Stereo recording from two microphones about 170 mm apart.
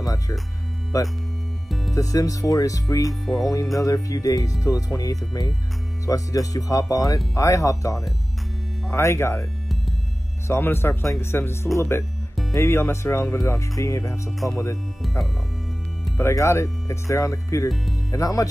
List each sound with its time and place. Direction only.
0.0 s music: 20° left (ahead or behind)
0.9 s speech: 20° left (ahead or behind)
3.1 s speech: centre (ahead or behind)
3.7 s speech: 20° left (ahead or behind)
10.5 s speech: 15° left (ahead or behind)
16.2 s speech: 15° left (ahead or behind)